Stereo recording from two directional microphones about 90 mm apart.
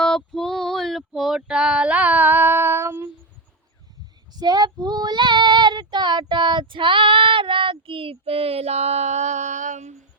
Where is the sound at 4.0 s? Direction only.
50° right (ahead or behind); by 8.6 s 90° right.